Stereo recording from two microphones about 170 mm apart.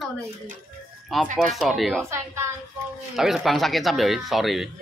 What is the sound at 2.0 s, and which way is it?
Speech, 15° right (ahead or behind).